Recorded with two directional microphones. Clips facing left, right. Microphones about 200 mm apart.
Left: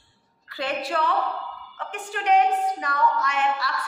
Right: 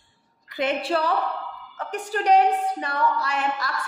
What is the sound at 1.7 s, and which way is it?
A woman's voice, 40° right (ahead or behind).